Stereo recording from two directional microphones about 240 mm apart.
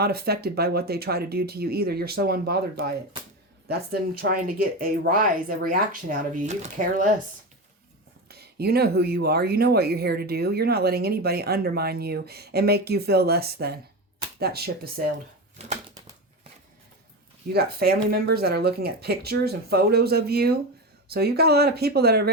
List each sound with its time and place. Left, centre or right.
0.0 s speech: right
4.3 s speech: right
8.3 s speech: right
15.6 s bird: right
17.5 s speech: right